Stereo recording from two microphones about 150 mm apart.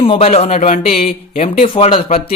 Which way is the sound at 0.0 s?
40° left (ahead or behind).